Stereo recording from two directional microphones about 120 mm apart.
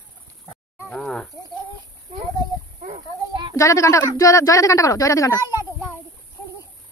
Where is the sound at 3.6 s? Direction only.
25° left (ahead or behind).